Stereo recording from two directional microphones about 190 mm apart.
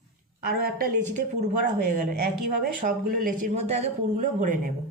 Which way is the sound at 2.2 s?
55° right (ahead or behind).